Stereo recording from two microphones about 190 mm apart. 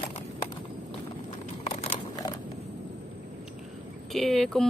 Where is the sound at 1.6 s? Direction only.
35° left (ahead or behind).